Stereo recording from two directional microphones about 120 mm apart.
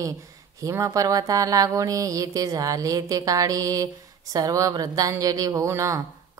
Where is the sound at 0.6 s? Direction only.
25° right (ahead or behind).